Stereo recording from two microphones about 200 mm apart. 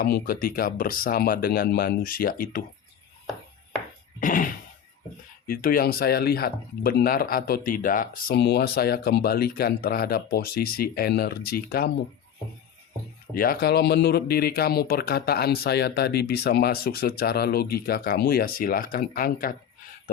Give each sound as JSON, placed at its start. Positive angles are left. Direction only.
{"t": 0.0, "sound": "speech", "side_deg": 45}
{"t": 4.2, "sound": "speech", "side_deg": 45}
{"t": 13.3, "sound": "speech", "side_deg": 45}